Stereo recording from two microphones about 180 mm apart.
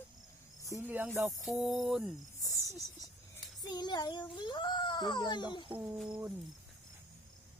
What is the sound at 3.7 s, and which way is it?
A child's voice, 25° left (ahead or behind).